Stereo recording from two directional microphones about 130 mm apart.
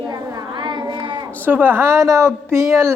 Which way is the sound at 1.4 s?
15° right (ahead or behind).